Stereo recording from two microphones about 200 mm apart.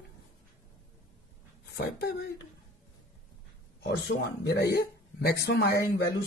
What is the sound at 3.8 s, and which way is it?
A man's voice, 55° left (ahead or behind).